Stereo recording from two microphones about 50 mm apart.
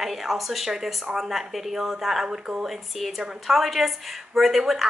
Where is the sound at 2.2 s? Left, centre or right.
Centre.